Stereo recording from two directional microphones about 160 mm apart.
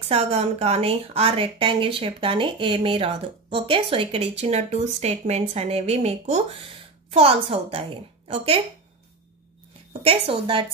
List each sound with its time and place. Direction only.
0.1 s speech: 40° right (ahead or behind)
10.0 s speech: 35° right (ahead or behind)